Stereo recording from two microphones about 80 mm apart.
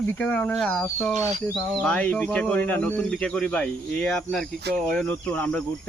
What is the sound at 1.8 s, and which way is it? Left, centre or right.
Speech, centre.